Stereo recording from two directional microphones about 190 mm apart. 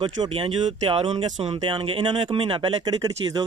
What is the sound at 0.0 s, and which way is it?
Speech, 25° right (ahead or behind).